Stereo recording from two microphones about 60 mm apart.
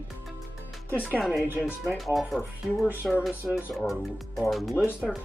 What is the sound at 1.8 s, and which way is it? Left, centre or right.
Speech, centre.